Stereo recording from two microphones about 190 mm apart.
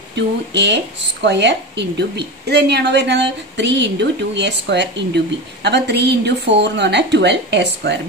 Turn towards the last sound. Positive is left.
turn(degrees=-65)  # may be behind; listen again after turning